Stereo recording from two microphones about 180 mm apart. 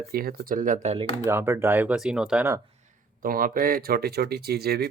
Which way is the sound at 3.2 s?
50° right (ahead or behind).